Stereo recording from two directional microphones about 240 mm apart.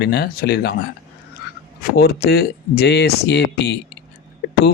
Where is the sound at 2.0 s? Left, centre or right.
Left.